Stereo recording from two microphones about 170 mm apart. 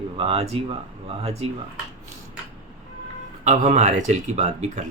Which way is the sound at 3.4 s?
40° right (ahead or behind).